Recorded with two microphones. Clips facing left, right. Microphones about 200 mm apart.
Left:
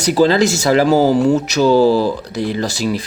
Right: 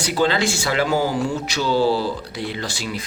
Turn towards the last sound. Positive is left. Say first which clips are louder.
# left 9 dB
turn(degrees=40)  # may be behind; listen again after turning